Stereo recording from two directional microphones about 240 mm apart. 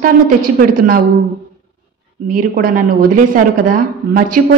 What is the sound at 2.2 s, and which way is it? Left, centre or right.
A woman's voice, right.